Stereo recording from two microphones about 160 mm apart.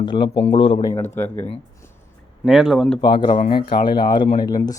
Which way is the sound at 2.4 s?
5° right (ahead or behind).